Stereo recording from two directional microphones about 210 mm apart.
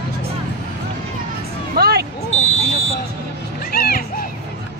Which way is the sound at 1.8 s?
50° right (ahead or behind).